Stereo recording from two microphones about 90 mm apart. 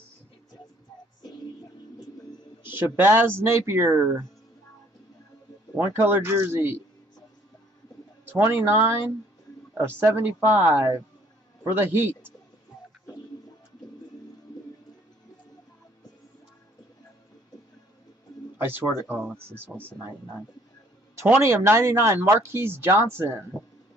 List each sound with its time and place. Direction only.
2.7 s speech: 20° right (ahead or behind)
5.8 s speech: 25° right (ahead or behind)
8.3 s speech: 25° right (ahead or behind)
11.6 s a man's voice: 25° right (ahead or behind)
18.7 s speech: 20° right (ahead or behind)
21.4 s speech: 30° right (ahead or behind)